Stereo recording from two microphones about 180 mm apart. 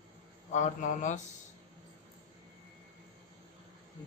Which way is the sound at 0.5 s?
45° left (ahead or behind).